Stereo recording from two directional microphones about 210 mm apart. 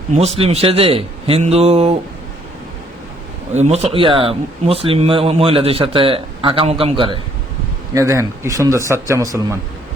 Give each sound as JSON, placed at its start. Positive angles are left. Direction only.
{"t": 0.1, "sound": "speech", "side_deg": -30}
{"t": 3.5, "sound": "speech", "side_deg": -30}
{"t": 7.9, "sound": "speech", "side_deg": -15}